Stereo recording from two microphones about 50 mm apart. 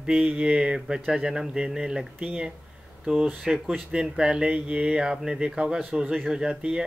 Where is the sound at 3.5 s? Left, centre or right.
Centre.